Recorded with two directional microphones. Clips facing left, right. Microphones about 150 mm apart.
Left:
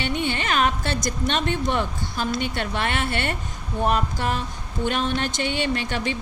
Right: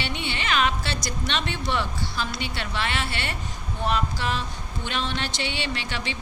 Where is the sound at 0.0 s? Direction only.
45° left (ahead or behind).